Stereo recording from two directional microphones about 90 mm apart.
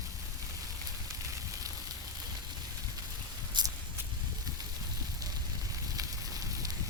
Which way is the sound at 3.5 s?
55° right (ahead or behind).